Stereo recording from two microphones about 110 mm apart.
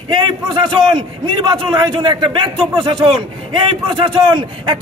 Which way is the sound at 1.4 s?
45° right (ahead or behind).